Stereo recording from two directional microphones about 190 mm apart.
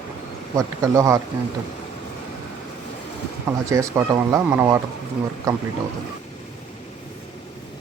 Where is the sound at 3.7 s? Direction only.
15° right (ahead or behind).